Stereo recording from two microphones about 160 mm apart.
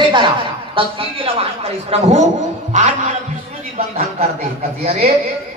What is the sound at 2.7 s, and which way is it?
Music, 50° right (ahead or behind).